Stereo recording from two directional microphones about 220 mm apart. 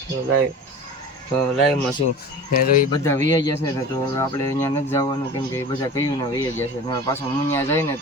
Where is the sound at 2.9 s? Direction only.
15° left (ahead or behind).